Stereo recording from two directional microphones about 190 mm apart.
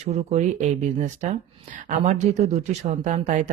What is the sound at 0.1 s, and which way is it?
Speech, 35° right (ahead or behind).